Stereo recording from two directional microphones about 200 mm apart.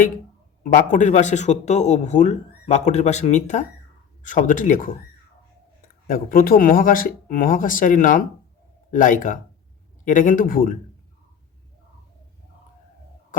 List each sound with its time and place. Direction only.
0.6 s speech: 40° left (ahead or behind)